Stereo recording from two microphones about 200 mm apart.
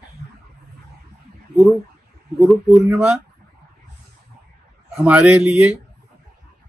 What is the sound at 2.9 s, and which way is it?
Speech, centre (ahead or behind).